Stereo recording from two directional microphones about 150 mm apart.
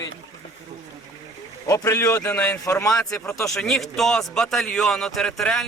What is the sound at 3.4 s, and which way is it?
Speech, 5° left (ahead or behind).